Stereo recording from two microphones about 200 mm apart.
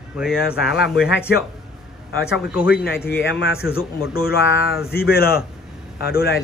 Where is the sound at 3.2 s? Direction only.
70° left (ahead or behind).